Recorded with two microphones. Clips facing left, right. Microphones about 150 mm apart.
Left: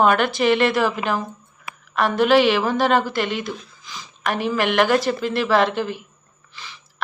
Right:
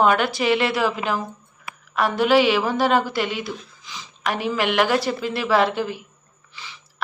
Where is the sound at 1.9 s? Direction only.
10° right (ahead or behind).